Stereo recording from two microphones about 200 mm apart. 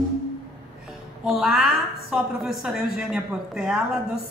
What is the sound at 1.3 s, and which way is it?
A woman's voice, centre (ahead or behind).